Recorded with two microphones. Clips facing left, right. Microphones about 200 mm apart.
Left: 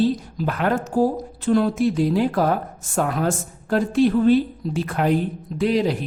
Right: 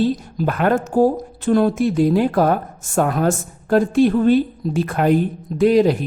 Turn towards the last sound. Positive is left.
turn(degrees=-45)  # may be behind; listen again after turning